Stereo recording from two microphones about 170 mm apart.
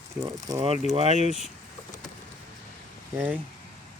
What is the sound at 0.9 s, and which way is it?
Speech, 40° right (ahead or behind).